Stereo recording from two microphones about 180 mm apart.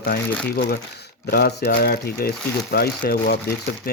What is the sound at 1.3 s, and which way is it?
Speech, 60° left (ahead or behind).